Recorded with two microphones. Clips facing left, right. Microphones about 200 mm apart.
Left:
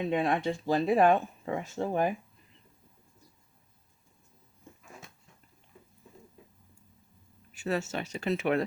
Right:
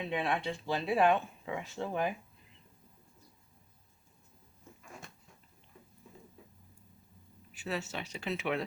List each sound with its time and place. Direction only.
0.0 s speech: 45° left (ahead or behind)
4.8 s a sound: centre (ahead or behind)
7.6 s speech: 45° left (ahead or behind)